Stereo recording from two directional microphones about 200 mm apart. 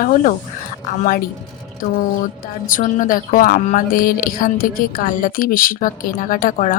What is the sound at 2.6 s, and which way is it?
A woman's voice, 45° left (ahead or behind).